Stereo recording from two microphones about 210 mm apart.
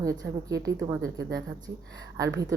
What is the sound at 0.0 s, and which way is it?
A woman's voice, 15° right (ahead or behind).